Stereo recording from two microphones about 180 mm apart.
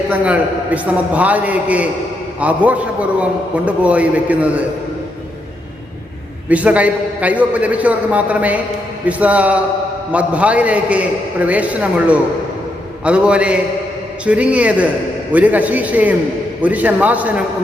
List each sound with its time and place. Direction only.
0.1 s a man's voice: 10° right (ahead or behind)
6.5 s a man's voice: 5° right (ahead or behind)